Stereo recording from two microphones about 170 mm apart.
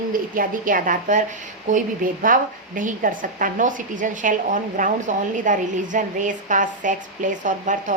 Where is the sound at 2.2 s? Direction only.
50° right (ahead or behind).